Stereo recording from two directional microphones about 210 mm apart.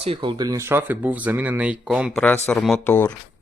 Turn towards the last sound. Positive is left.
turn(degrees=10)  # may be behind; listen again after turning